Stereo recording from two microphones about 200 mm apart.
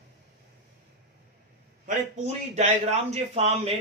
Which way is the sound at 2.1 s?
35° right (ahead or behind).